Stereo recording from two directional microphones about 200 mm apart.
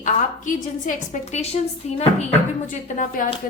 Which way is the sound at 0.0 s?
40° left (ahead or behind).